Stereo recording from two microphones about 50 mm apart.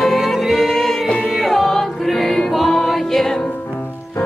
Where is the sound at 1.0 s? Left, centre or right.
Left.